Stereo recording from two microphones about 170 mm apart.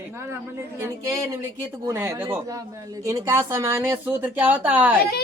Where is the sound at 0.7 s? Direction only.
15° right (ahead or behind).